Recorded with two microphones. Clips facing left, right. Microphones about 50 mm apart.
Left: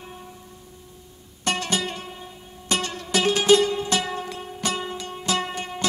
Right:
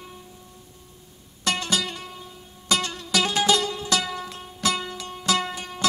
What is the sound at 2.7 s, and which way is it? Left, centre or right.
Music, left.